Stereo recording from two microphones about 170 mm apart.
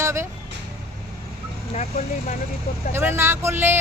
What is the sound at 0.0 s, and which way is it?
Vehicle, 15° right (ahead or behind).